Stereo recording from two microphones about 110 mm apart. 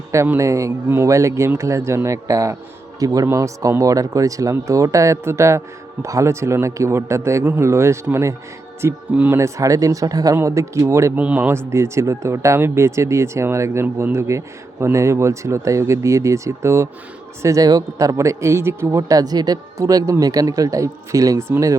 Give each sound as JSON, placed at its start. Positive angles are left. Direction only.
{"t": 0.1, "sound": "speech", "side_deg": -25}
{"t": 9.4, "sound": "speech", "side_deg": -30}